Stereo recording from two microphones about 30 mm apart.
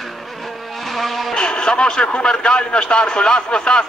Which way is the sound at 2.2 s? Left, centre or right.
Left.